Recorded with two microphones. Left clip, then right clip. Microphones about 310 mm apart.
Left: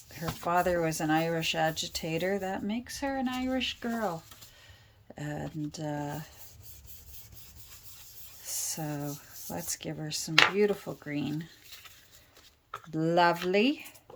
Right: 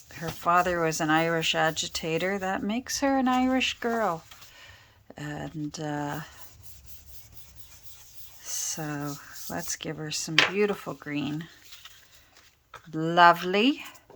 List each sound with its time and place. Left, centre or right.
0.1 s speech: centre
8.4 s speech: centre
12.9 s speech: centre